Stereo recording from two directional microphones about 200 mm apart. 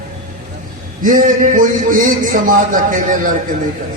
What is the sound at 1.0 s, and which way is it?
A man's voice, 40° right (ahead or behind).